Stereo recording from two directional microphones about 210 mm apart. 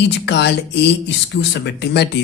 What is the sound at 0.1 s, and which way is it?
Speech, 55° left (ahead or behind).